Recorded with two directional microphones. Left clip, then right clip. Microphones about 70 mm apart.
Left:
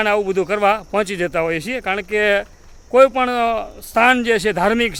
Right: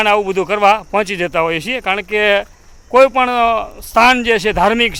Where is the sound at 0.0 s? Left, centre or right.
Centre.